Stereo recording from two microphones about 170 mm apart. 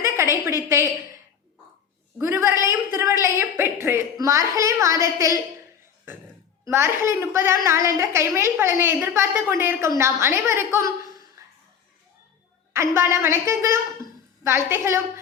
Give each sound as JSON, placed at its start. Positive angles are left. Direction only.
{"t": 0.0, "sound": "a sound", "side_deg": -15}
{"t": 0.7, "sound": "a woman's voice", "side_deg": -15}
{"t": 2.2, "sound": "a woman's voice", "side_deg": -15}
{"t": 6.7, "sound": "a woman's voice", "side_deg": -15}
{"t": 11.4, "sound": "music", "side_deg": -15}
{"t": 12.7, "sound": "a woman's voice", "side_deg": -15}